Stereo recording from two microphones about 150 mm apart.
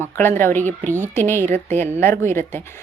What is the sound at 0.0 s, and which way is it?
Speech, 15° left (ahead or behind).